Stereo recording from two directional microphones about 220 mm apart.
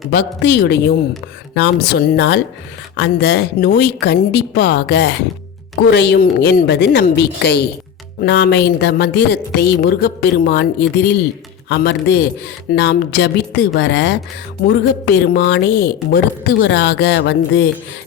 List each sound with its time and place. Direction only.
0.1 s speech: 50° left (ahead or behind)